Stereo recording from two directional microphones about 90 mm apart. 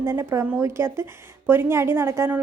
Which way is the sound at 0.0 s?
25° right (ahead or behind).